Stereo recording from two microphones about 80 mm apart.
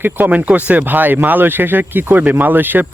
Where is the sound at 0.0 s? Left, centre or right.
Right.